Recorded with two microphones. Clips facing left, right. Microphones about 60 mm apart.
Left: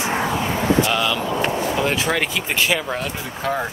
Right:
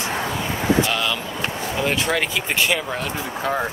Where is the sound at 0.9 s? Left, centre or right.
Centre.